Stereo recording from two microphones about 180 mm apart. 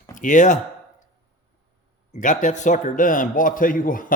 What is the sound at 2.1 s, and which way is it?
A man's voice, 45° left (ahead or behind).